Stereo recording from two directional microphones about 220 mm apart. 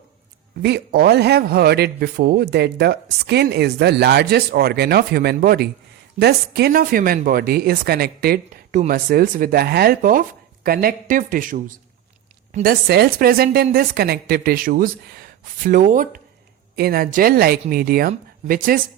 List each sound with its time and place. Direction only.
0.6 s a man's voice: 45° right (ahead or behind)